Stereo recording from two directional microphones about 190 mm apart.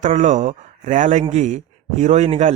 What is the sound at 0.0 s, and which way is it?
Speech, 40° right (ahead or behind).